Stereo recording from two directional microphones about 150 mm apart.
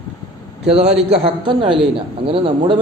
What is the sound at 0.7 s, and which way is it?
A man's voice, 45° right (ahead or behind).